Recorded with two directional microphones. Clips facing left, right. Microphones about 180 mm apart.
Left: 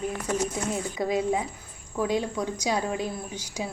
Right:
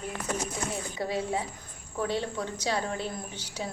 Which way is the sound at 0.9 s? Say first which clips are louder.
Left 5 dB; 15° left (ahead or behind).